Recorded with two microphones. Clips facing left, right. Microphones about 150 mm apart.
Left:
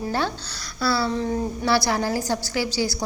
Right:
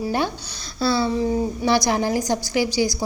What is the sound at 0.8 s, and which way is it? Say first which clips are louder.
A woman's voice: right 3 dB; 20° right (ahead or behind).